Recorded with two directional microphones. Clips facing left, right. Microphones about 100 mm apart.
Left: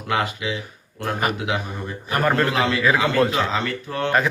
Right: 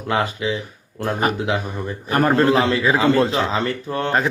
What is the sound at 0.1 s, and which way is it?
A man's voice, 30° right (ahead or behind).